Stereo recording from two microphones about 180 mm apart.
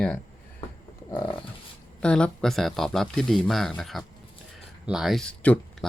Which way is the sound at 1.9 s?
5° left (ahead or behind).